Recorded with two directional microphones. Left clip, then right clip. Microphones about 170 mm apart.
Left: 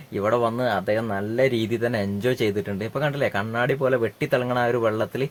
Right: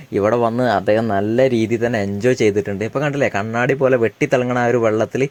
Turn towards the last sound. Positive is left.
turn(degrees=-25)  # may be behind; listen again after turning